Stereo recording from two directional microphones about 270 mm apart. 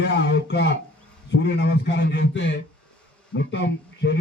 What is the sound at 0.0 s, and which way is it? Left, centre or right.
A man's voice, left.